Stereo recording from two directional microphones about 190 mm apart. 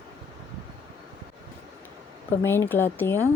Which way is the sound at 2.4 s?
10° left (ahead or behind).